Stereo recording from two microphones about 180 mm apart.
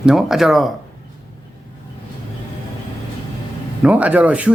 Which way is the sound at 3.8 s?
10° right (ahead or behind).